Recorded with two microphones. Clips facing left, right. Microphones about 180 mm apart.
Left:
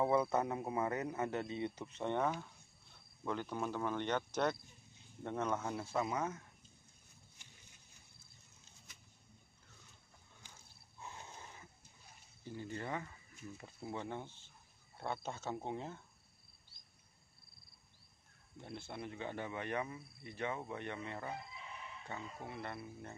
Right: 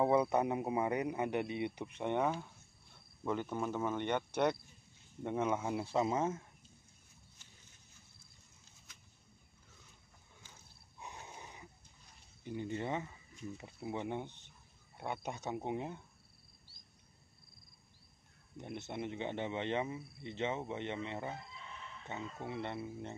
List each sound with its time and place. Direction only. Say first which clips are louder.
0.0 s speech: right 3 dB; 15° right (ahead or behind)
5.2 s speech: right 3 dB; 10° right (ahead or behind); by 6.4 s 25° right (ahead or behind)
11.0 s a sound: right 2 dB; 15° right (ahead or behind)
12.4 s speech: right 5 dB; 20° right (ahead or behind)
18.6 s speech: right 5 dB; 20° right (ahead or behind)